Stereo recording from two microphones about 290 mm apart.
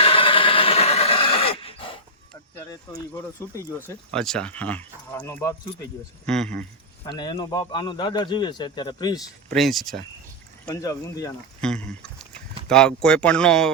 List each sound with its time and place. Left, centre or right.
0.0 s dog: centre
2.6 s a man's voice: centre
7.1 s speech: centre
9.5 s speech: centre
10.7 s speech: centre